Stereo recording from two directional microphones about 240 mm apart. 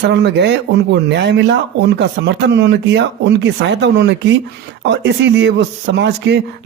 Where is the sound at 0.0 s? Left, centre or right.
Right.